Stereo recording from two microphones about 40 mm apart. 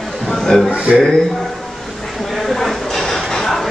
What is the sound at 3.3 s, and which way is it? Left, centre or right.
Music, centre.